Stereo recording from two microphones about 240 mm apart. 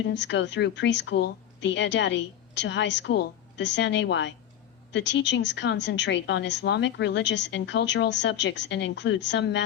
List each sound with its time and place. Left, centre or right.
0.0 s a woman's voice: left